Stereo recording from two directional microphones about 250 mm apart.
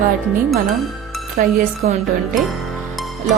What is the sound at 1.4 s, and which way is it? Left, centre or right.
Speech, right.